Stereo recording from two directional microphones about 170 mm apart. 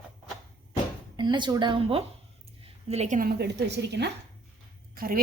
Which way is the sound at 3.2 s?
70° right (ahead or behind).